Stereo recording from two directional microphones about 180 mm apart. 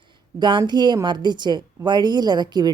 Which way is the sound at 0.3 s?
25° right (ahead or behind).